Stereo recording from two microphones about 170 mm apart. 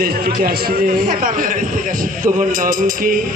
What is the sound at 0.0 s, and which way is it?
A man's voice, 60° right (ahead or behind).